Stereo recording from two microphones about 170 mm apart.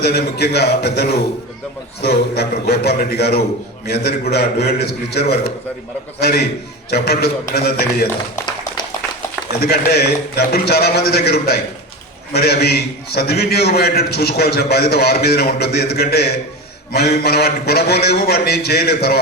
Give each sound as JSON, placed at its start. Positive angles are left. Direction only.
{"t": 0.0, "sound": "a man's voice", "side_deg": 70}
{"t": 9.5, "sound": "a man's voice", "side_deg": 65}